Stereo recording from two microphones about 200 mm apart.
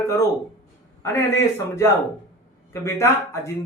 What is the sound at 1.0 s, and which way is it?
A man's voice, 15° left (ahead or behind).